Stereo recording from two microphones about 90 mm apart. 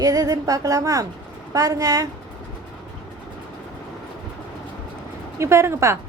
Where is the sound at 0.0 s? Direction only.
40° right (ahead or behind).